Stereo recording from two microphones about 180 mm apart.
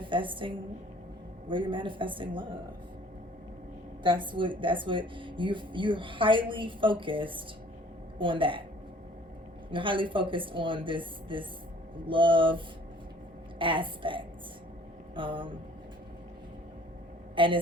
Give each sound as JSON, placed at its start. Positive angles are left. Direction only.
{"t": 0.0, "sound": "a woman's voice", "side_deg": -25}
{"t": 4.0, "sound": "speech", "side_deg": -25}
{"t": 9.7, "sound": "speech", "side_deg": -30}
{"t": 15.1, "sound": "vehicle", "side_deg": -30}
{"t": 17.3, "sound": "speech", "side_deg": -30}